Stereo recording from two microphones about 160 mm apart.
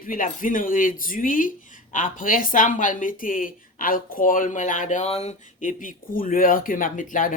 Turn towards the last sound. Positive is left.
turn(degrees=55)  # may be behind; listen again after turning